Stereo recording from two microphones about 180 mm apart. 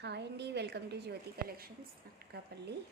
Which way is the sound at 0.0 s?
70° right (ahead or behind).